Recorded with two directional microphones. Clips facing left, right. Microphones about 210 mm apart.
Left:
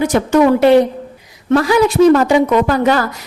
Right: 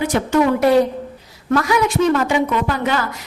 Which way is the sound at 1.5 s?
30° left (ahead or behind).